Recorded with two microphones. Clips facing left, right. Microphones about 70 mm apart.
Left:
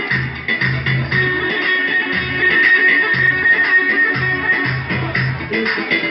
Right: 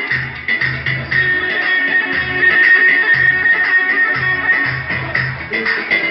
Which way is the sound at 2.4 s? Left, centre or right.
Centre.